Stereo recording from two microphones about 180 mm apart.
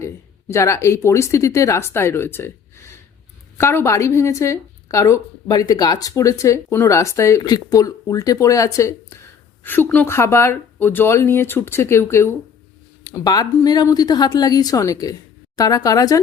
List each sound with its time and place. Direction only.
0.0 s a woman's voice: 15° left (ahead or behind)